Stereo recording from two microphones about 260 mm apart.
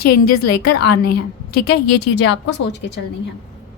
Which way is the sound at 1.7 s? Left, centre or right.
Left.